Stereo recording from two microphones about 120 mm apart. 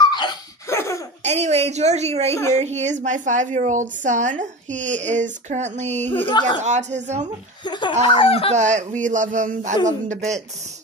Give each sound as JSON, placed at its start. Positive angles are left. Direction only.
{"t": 0.1, "sound": "laughter", "side_deg": 40}
{"t": 0.7, "sound": "laughter", "side_deg": 25}
{"t": 1.2, "sound": "a woman's voice", "side_deg": -70}
{"t": 7.6, "sound": "speech", "side_deg": 40}
{"t": 8.1, "sound": "speech", "side_deg": 50}
{"t": 8.5, "sound": "a woman's voice", "side_deg": -75}